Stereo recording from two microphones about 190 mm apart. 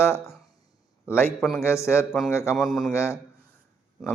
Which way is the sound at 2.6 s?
Centre (ahead or behind).